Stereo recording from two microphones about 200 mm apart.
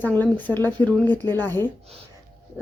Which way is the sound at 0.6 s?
20° right (ahead or behind).